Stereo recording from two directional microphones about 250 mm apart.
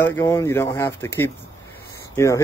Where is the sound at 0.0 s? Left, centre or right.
Centre.